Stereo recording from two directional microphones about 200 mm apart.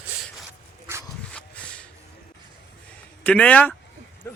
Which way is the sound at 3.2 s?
5° left (ahead or behind).